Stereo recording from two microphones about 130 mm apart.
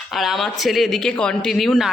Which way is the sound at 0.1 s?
Centre (ahead or behind).